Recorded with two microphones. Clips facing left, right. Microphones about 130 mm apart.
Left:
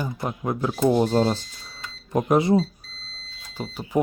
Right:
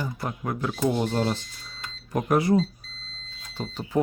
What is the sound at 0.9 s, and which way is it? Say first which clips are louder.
Speech: left 5 dB; 35° left (ahead or behind).